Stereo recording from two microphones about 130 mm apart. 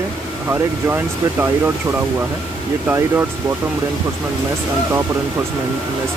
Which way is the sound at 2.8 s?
15° right (ahead or behind).